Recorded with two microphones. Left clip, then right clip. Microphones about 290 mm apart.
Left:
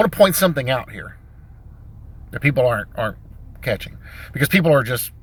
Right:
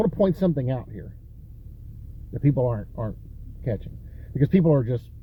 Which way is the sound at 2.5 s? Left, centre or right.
Left.